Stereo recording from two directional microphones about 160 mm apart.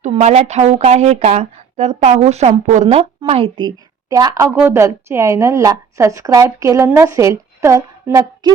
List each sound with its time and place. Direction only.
0.0 s speech: 45° right (ahead or behind)
4.1 s a woman's voice: 25° right (ahead or behind)